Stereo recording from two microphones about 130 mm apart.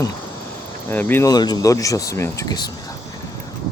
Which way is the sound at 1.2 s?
30° left (ahead or behind).